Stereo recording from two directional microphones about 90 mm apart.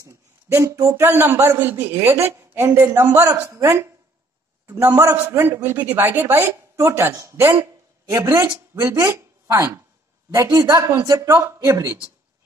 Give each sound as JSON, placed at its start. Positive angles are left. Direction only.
{"t": 0.5, "sound": "speech", "side_deg": -35}
{"t": 1.0, "sound": "a man's voice", "side_deg": -25}
{"t": 8.7, "sound": "speech", "side_deg": -25}
{"t": 10.3, "sound": "speech", "side_deg": -40}